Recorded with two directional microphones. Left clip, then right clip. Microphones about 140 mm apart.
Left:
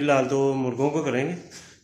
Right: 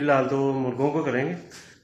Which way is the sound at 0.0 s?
10° left (ahead or behind).